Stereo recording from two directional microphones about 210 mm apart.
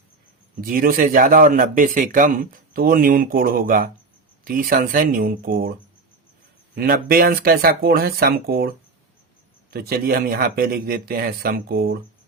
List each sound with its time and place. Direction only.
0.6 s a man's voice: 45° right (ahead or behind)
6.7 s speech: 45° right (ahead or behind)